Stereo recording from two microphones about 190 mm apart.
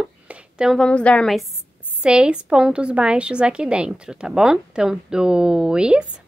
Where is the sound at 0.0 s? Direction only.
5° right (ahead or behind).